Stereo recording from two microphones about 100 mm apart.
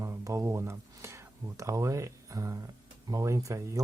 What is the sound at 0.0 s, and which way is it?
Speech, 30° right (ahead or behind).